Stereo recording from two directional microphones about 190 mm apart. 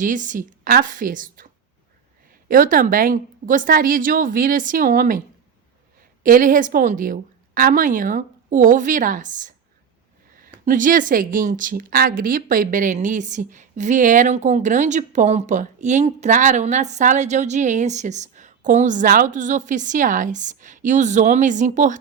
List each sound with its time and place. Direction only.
0.0 s a woman's voice: 45° right (ahead or behind)
2.5 s a woman's voice: 45° right (ahead or behind)
6.2 s a woman's voice: 45° right (ahead or behind)